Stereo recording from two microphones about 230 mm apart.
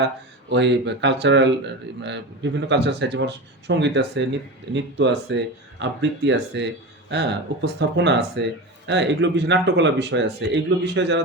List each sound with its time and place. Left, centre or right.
0.5 s speech: right